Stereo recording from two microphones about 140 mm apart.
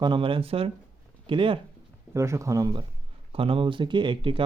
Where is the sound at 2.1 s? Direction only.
20° right (ahead or behind).